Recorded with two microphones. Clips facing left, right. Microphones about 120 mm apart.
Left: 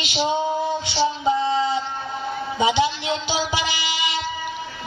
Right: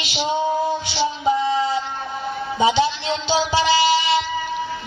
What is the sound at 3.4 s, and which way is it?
Music, 15° left (ahead or behind).